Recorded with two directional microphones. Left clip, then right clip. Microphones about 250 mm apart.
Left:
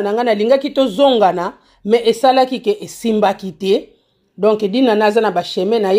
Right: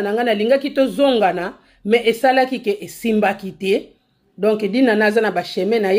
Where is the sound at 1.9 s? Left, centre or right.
Left.